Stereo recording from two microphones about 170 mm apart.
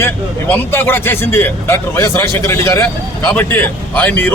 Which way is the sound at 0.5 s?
10° left (ahead or behind).